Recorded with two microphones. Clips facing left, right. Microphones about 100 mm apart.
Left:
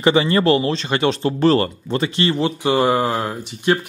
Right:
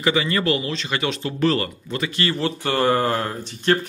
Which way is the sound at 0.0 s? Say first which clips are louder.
Left 6 dB; 30° left (ahead or behind).